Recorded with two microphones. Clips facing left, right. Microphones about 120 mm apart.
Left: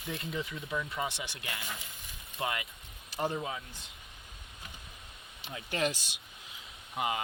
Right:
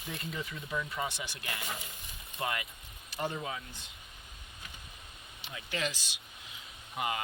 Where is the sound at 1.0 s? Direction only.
25° left (ahead or behind).